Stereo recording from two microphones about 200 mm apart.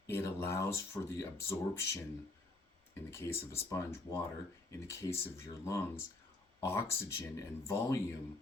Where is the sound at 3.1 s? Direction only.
15° left (ahead or behind).